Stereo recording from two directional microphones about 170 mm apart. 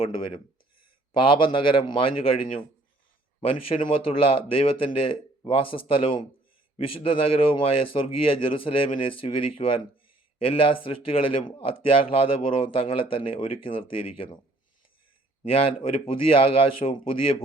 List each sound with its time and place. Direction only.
1.1 s a man's voice: 30° left (ahead or behind)
3.8 s a man's voice: 35° left (ahead or behind)
15.4 s a man's voice: 35° left (ahead or behind)